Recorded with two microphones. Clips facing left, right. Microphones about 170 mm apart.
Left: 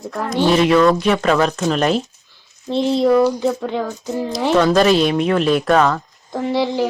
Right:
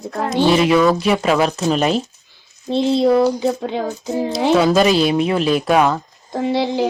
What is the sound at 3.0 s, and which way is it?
Speech, 20° right (ahead or behind).